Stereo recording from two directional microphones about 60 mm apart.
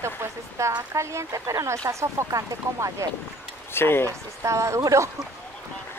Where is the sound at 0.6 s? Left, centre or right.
Right.